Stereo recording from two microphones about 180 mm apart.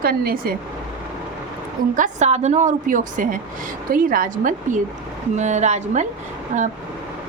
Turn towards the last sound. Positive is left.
turn(degrees=-40)  # may be behind; listen again after turning